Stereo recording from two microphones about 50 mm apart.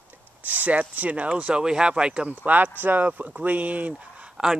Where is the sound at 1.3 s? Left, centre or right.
Right.